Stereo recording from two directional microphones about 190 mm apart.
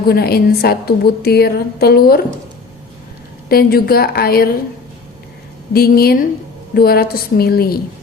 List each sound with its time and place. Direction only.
0.1 s a woman's voice: 55° left (ahead or behind)
3.5 s a woman's voice: 55° left (ahead or behind)
5.7 s a woman's voice: 55° left (ahead or behind)